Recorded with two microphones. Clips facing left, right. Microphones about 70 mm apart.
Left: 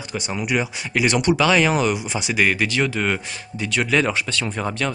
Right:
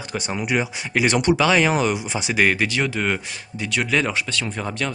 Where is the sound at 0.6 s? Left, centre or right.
Centre.